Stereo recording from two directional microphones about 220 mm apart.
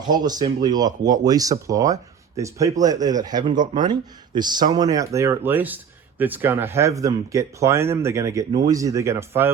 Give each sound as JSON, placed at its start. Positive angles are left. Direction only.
{"t": 0.0, "sound": "speech", "side_deg": -20}